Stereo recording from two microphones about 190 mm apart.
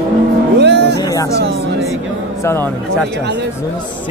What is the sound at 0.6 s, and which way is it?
Music, 65° right (ahead or behind).